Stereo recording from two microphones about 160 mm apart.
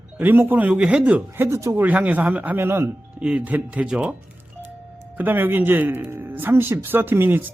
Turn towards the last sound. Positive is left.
turn(degrees=-10)  # may be behind; listen again after turning